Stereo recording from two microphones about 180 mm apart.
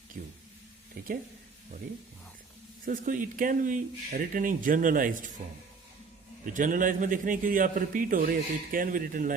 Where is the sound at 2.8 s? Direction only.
50° right (ahead or behind).